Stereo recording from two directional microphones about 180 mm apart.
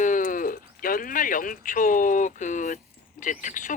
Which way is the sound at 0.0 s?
45° left (ahead or behind).